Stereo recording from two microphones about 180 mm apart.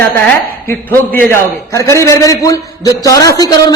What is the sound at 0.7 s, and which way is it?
A man's voice, 10° left (ahead or behind).